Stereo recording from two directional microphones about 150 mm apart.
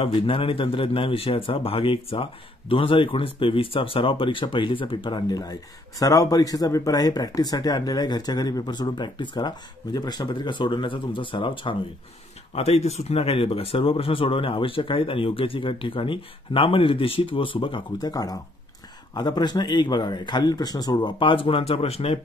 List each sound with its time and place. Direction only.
0.0 s speech: 40° left (ahead or behind)
12.5 s speech: 45° left (ahead or behind)